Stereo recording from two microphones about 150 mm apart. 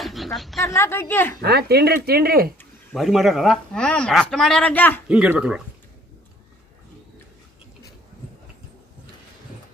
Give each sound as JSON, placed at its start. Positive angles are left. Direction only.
{"t": 0.0, "sound": "a sound", "side_deg": 0}
{"t": 0.7, "sound": "a woman's voice", "side_deg": 15}
{"t": 1.4, "sound": "speech", "side_deg": -90}
{"t": 2.9, "sound": "a woman's voice", "side_deg": 0}
{"t": 5.0, "sound": "speech", "side_deg": -5}